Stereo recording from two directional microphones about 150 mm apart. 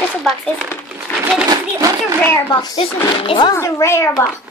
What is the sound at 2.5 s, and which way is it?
Speech, 30° left (ahead or behind).